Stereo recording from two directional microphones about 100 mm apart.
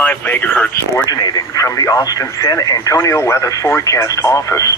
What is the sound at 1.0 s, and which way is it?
Speech, 40° left (ahead or behind).